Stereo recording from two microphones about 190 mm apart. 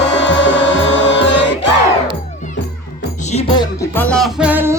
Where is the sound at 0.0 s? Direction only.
70° left (ahead or behind).